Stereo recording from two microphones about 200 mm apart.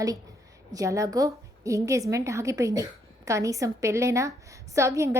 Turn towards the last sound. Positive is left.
turn(degrees=-15)  # may be behind; listen again after turning